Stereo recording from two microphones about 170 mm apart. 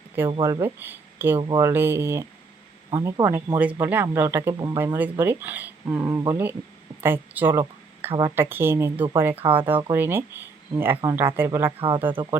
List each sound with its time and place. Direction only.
0.4 s speech: 15° right (ahead or behind)
4.9 s speech: 10° right (ahead or behind)
11.8 s speech: 30° right (ahead or behind)